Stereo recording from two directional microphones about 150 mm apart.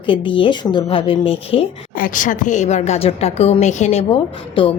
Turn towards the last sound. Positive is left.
turn(degrees=35)  # may be behind; listen again after turning